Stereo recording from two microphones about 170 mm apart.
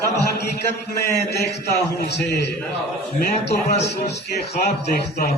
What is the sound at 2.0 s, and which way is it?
Speech, 80° left.